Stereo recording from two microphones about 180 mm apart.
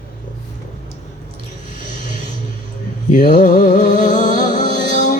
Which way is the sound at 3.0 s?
45° left (ahead or behind).